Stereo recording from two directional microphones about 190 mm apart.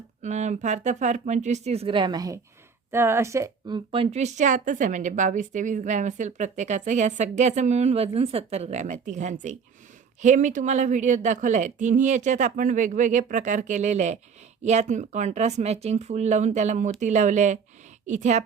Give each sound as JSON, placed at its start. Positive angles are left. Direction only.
{"t": 0.2, "sound": "speech", "side_deg": -40}